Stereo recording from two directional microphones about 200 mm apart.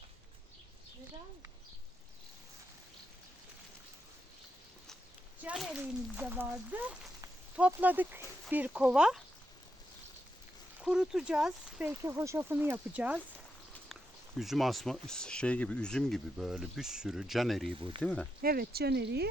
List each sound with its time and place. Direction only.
5.4 s speech: 5° right (ahead or behind)
10.8 s speech: 5° right (ahead or behind)
17.7 s speech: 25° right (ahead or behind)
18.0 s speech: 5° left (ahead or behind)
18.4 s speech: 50° right (ahead or behind)